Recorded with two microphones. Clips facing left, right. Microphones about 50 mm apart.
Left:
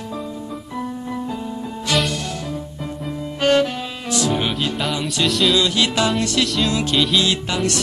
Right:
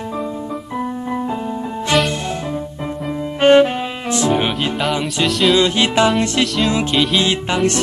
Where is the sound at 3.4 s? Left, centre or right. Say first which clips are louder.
Right 6 dB; right.